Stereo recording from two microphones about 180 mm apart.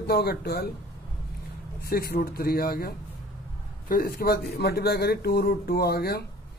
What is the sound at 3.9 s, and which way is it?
A man's voice, 55° left (ahead or behind).